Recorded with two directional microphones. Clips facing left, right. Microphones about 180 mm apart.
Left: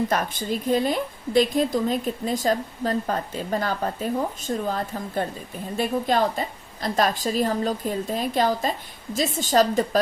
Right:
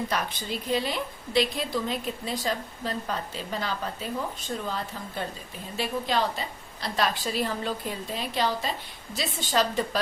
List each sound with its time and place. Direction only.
0.1 s a woman's voice: 50° left (ahead or behind)